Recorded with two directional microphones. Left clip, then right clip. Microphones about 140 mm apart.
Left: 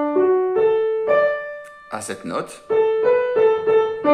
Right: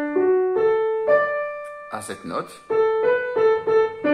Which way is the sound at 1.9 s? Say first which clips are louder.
Left 7 dB; 20° left (ahead or behind).